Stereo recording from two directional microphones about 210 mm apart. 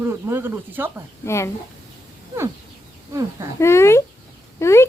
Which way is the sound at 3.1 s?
15° right (ahead or behind).